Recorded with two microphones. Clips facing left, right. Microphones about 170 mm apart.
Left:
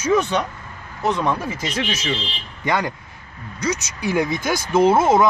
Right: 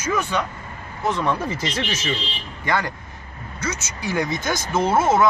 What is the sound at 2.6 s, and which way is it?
Speech, 15° left (ahead or behind).